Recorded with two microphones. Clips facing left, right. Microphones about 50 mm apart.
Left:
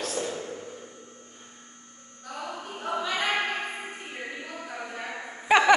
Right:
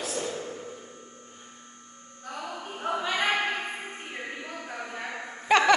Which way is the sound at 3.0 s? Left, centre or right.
Right.